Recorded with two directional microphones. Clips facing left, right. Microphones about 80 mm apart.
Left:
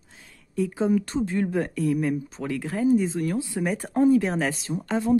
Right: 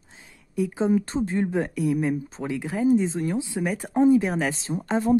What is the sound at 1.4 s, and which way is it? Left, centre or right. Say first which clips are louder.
A woman's voice: even; centre.